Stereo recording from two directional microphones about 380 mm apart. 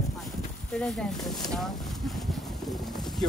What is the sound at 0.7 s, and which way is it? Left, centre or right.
Speech, centre.